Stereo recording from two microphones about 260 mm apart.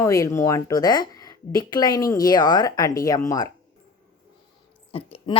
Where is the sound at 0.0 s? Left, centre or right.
Centre.